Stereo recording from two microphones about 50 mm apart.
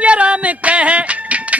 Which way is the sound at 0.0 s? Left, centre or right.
Right.